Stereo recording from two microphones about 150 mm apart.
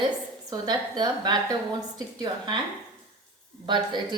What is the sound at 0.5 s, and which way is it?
A woman's voice, 25° right (ahead or behind).